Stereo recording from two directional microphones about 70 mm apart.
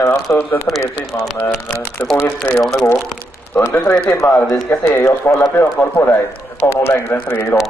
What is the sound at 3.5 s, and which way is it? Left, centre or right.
Speech, left.